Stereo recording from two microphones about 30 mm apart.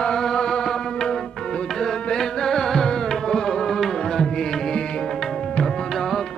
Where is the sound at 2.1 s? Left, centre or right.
Centre.